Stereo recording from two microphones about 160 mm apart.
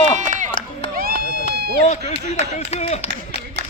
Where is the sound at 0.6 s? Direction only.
60° right (ahead or behind).